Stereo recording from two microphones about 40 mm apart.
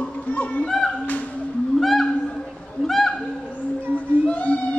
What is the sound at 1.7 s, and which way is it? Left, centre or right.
Whale vocalization, centre.